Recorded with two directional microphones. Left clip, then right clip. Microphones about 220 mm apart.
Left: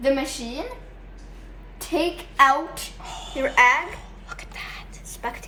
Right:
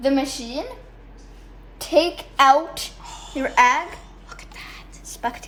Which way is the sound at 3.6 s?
45° right (ahead or behind).